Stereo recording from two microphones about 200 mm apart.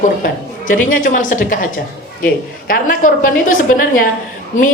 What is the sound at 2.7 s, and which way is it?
A woman's voice, 45° left (ahead or behind).